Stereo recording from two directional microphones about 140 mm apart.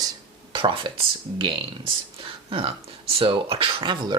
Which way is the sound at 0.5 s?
40° right (ahead or behind).